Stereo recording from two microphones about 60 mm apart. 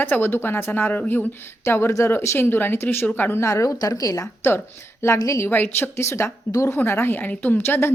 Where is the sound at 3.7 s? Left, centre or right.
Left.